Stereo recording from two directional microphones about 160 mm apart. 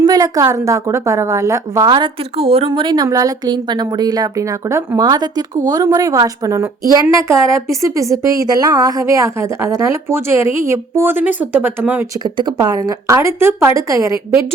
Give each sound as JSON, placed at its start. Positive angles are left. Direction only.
{"t": 0.0, "sound": "a woman's voice", "side_deg": -20}
{"t": 12.2, "sound": "a woman's voice", "side_deg": -25}